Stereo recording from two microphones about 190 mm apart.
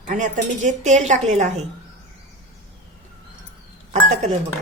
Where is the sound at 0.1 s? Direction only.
40° right (ahead or behind).